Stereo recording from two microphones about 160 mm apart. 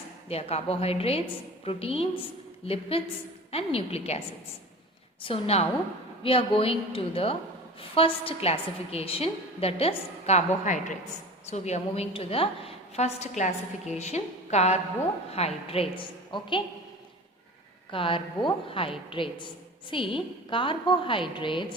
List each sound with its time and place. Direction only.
0.3 s a woman's voice: 40° left (ahead or behind)
5.2 s a woman's voice: 40° left (ahead or behind)
17.9 s a woman's voice: 35° left (ahead or behind)